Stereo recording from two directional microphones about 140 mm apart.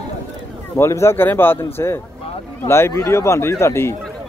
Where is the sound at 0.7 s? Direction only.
20° left (ahead or behind).